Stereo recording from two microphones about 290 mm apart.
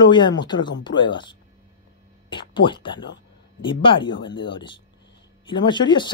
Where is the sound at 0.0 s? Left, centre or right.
Centre.